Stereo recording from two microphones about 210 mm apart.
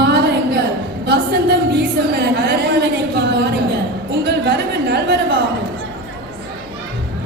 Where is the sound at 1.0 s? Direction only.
50° right (ahead or behind).